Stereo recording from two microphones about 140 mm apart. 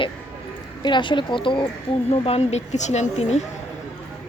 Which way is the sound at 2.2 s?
50° left (ahead or behind).